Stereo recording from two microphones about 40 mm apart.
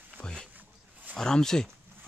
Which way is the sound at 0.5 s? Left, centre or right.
Right.